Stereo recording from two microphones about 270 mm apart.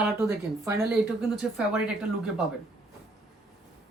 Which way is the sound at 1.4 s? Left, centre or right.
Centre.